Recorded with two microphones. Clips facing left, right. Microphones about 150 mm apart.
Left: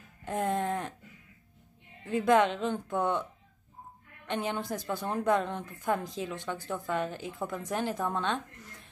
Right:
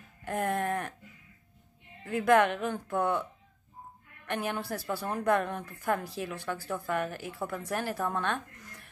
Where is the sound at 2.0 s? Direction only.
20° left (ahead or behind).